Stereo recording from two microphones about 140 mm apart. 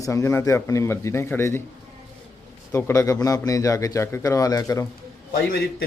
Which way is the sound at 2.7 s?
15° left (ahead or behind).